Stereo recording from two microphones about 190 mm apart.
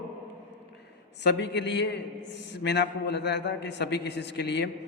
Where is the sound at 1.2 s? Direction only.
65° left (ahead or behind).